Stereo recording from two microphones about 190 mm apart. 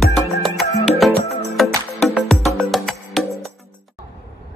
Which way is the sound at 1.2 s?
35° left (ahead or behind).